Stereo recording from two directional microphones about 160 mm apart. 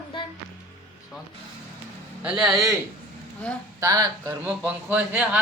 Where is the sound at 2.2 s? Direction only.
5° right (ahead or behind).